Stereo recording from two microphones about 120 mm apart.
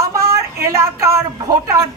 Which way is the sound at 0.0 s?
25° right (ahead or behind).